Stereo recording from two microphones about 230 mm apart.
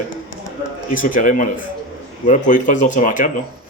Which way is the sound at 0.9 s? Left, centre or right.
Left.